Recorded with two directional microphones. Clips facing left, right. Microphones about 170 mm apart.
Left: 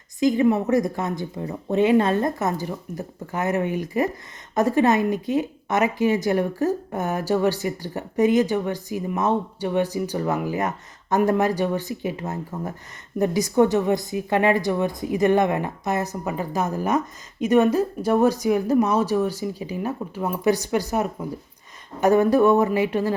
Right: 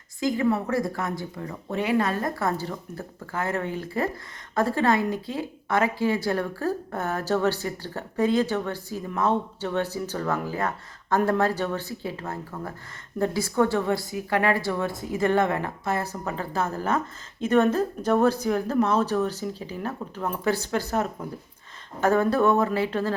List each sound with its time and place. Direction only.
0.2 s speech: 20° left (ahead or behind)